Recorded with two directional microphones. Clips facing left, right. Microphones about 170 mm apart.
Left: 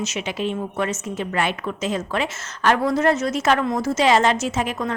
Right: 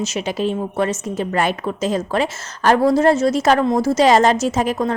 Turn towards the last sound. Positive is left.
turn(degrees=-35)  # may be behind; listen again after turning